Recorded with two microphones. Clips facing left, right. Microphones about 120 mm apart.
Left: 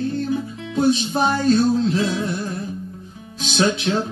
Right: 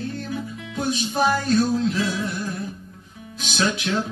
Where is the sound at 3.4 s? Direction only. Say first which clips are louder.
Left 4 dB; 30° left (ahead or behind).